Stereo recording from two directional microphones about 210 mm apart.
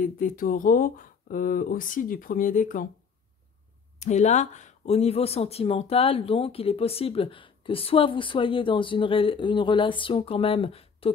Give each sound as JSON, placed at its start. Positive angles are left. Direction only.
{"t": 0.0, "sound": "speech", "side_deg": 40}
{"t": 4.0, "sound": "speech", "side_deg": 35}